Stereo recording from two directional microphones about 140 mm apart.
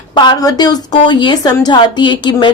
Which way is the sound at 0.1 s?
30° left (ahead or behind).